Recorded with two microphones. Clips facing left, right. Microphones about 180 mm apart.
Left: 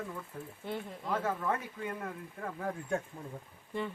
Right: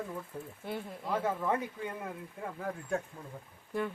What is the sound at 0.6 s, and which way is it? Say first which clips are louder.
Speech: left 1 dB; 10° right (ahead or behind).